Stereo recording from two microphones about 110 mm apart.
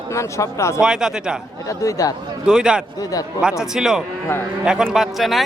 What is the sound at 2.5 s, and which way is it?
Speech, 5° right (ahead or behind).